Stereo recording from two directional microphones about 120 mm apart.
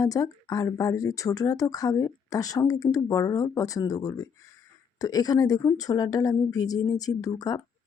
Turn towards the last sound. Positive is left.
turn(degrees=30)  # may be behind; listen again after turning